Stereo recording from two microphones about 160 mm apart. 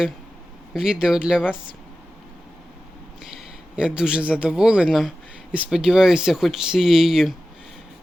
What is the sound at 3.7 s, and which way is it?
A man's voice, 5° right (ahead or behind).